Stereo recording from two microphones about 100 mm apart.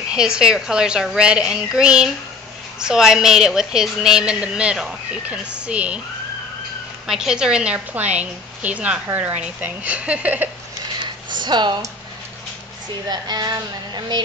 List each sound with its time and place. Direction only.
0.1 s a woman's voice: 5° right (ahead or behind)
7.1 s speech: 5° right (ahead or behind)
11.0 s a sound: 50° right (ahead or behind)
13.1 s speech: 45° right (ahead or behind)